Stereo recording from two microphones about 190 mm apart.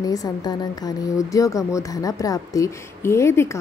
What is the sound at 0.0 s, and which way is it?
A woman's voice, 20° left (ahead or behind).